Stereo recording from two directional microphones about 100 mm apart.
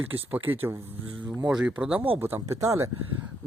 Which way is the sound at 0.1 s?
20° right (ahead or behind).